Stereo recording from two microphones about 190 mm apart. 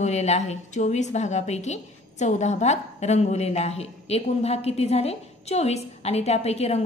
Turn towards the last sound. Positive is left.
turn(degrees=35)  # may be behind; listen again after turning